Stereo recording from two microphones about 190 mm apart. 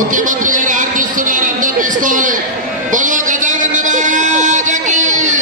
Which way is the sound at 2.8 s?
45° right (ahead or behind).